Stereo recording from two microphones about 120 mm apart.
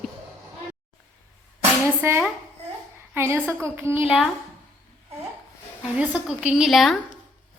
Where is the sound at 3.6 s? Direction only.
20° right (ahead or behind).